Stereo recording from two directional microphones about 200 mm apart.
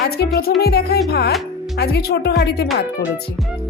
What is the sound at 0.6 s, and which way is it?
Speech, 55° left (ahead or behind).